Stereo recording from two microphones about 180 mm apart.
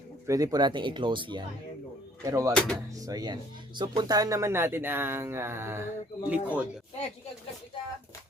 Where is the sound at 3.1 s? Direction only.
20° right (ahead or behind).